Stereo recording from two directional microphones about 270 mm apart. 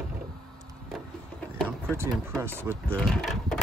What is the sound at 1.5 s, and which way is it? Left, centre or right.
Vehicle, centre.